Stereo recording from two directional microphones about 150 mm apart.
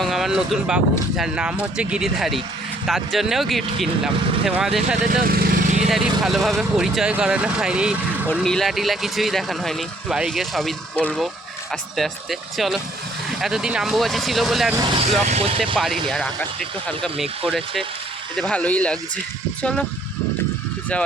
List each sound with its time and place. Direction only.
0.0 s speech: centre (ahead or behind)
5.0 s speech: 85° right
5.9 s speech: centre (ahead or behind)
14.9 s speech: 45° right (ahead or behind)
16.0 s speech: centre (ahead or behind)